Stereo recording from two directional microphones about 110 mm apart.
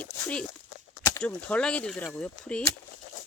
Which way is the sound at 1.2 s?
10° left (ahead or behind).